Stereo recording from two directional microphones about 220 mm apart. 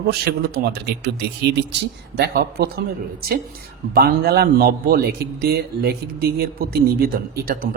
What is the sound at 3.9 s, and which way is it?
A man's voice, 45° right (ahead or behind).